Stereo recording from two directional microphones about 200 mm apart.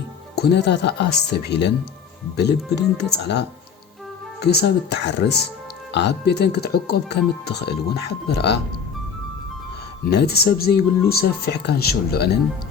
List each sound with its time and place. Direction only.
0.3 s speech: 55° left (ahead or behind)
10.1 s speech: 55° left (ahead or behind)